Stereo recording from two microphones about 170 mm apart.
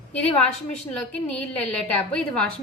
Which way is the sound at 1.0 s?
5° left (ahead or behind).